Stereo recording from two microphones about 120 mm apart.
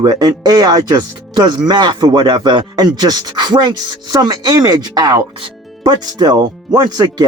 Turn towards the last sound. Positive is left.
turn(degrees=-35)  # may be behind; listen again after turning